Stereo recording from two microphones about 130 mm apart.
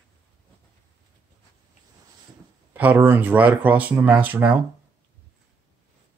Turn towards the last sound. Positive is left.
turn(degrees=-15)  # may be behind; listen again after turning